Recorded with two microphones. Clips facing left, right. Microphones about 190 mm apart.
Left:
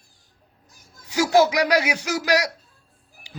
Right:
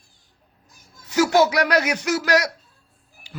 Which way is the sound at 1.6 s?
10° left (ahead or behind).